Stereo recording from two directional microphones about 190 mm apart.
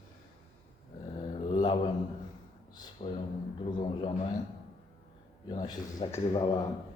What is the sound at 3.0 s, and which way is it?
Speech, 35° left (ahead or behind).